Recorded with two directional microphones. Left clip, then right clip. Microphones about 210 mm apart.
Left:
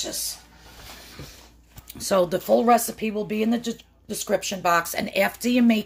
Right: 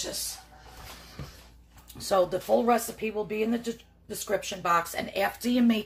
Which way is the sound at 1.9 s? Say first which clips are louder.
Left 3 dB; 35° left (ahead or behind).